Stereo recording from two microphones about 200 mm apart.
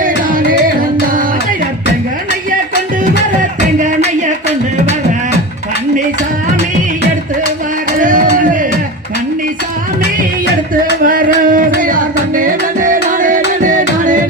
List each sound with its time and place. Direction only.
0.0 s music: 45° right (ahead or behind)
8.0 s a sound: 40° right (ahead or behind)
11.0 s music: 45° right (ahead or behind)